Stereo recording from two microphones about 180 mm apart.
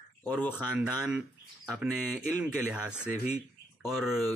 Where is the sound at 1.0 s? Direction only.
Centre (ahead or behind).